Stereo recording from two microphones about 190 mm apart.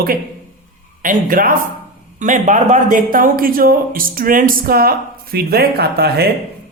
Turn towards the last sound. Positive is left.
turn(degrees=-55)  # may be behind; listen again after turning